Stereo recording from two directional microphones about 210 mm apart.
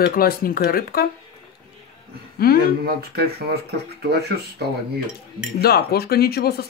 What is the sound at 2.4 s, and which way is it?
Speech, 45° left (ahead or behind).